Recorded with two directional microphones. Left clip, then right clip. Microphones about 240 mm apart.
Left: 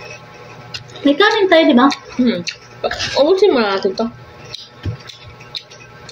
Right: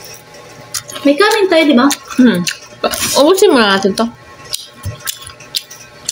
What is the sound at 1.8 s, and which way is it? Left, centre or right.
Speech, right.